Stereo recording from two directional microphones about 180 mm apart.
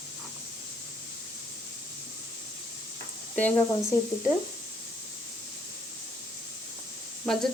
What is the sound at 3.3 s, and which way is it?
Speech, 10° left (ahead or behind).